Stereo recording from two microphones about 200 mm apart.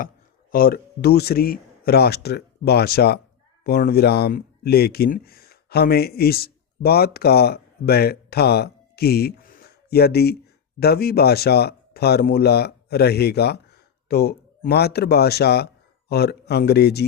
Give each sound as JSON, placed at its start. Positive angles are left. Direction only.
{"t": 0.5, "sound": "a man's voice", "side_deg": 50}